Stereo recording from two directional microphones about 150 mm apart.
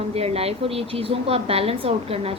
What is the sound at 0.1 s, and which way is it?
A woman's voice, 45° right (ahead or behind).